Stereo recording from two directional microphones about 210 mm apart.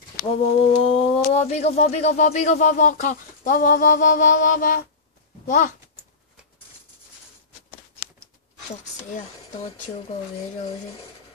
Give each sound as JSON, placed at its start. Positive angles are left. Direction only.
{"t": 0.4, "sound": "speech", "side_deg": 30}